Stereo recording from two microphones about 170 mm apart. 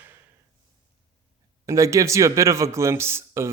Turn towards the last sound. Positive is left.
turn(degrees=-15)  # may be behind; listen again after turning